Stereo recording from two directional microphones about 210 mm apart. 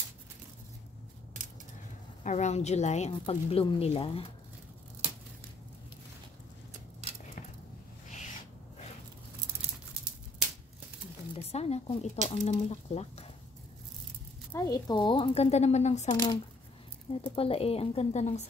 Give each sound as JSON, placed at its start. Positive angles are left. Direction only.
{"t": 2.2, "sound": "a woman's voice", "side_deg": 35}
{"t": 11.3, "sound": "speech", "side_deg": 30}
{"t": 14.5, "sound": "speech", "side_deg": 15}
{"t": 17.2, "sound": "speech", "side_deg": 25}